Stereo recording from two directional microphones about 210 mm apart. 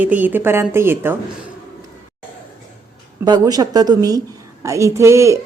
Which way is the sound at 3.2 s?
20° right (ahead or behind).